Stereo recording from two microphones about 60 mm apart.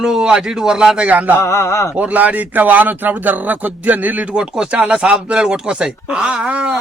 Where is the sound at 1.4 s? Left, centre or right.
Left.